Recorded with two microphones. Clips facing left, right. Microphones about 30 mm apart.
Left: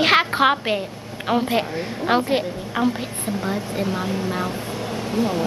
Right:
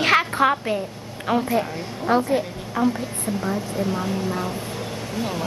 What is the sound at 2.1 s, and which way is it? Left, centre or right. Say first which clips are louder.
A woman's voice: even; left.